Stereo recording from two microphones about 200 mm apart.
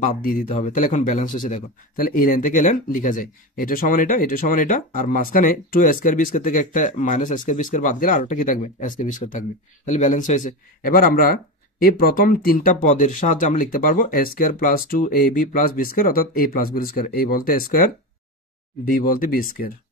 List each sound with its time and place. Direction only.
0.0 s speech: 45° left (ahead or behind)